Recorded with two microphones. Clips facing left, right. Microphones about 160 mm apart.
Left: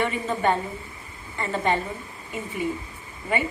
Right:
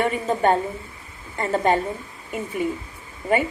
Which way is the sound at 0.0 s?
45° right (ahead or behind).